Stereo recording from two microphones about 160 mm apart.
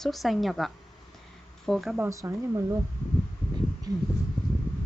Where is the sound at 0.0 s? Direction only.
Centre (ahead or behind).